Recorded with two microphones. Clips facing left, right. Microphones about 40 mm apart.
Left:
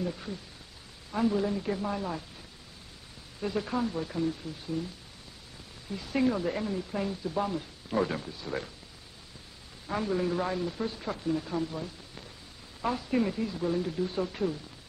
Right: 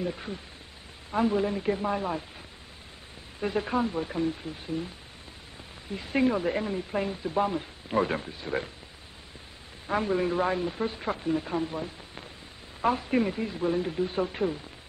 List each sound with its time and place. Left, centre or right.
0.0 s speech: right
3.3 s speech: right
9.8 s speech: right